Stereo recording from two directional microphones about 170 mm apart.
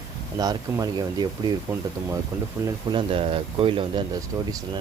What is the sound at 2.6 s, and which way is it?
Speech, 30° right (ahead or behind).